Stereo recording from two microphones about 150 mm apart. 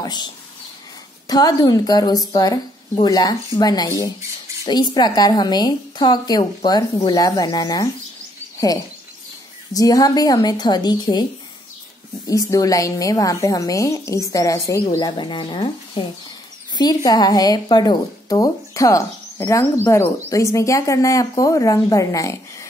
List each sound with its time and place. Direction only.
0.0 s a woman's voice: 30° left (ahead or behind)
9.7 s a woman's voice: 25° left (ahead or behind)
12.3 s a woman's voice: 20° left (ahead or behind)
15.0 s a woman's voice: 35° left (ahead or behind)